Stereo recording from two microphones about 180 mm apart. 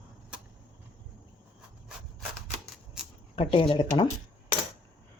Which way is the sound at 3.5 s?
30° left (ahead or behind).